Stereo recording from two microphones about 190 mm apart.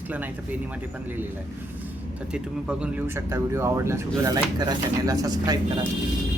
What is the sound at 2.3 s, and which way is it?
Speech, 5° right (ahead or behind).